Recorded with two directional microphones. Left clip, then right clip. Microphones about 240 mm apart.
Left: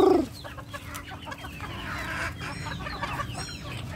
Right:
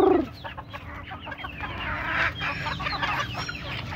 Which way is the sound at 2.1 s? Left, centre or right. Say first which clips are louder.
Right 7 dB; centre.